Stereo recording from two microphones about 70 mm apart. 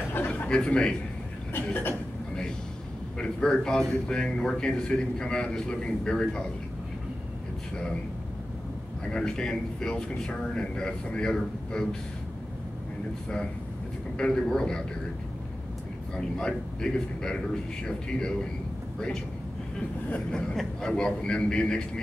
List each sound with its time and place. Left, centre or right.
0.5 s speech: centre
1.5 s a sound: left
3.2 s speech: centre
7.7 s speech: centre
9.1 s speech: centre
14.1 s speech: centre
16.2 s speech: centre
20.1 s speech: centre